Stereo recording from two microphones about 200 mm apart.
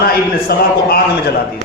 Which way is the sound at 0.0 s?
50° left (ahead or behind).